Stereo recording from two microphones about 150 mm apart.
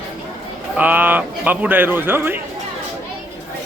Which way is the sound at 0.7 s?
10° right (ahead or behind).